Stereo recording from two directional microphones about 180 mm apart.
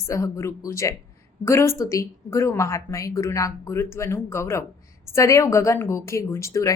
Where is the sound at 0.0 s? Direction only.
15° left (ahead or behind).